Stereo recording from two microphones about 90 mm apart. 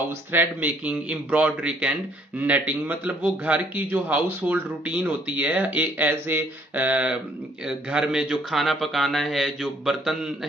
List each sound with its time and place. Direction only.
0.3 s a man's voice: 20° right (ahead or behind); by 10.3 s 5° right (ahead or behind)